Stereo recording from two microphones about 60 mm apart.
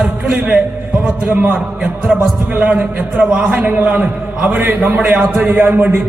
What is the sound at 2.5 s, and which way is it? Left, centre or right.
A man's voice, right.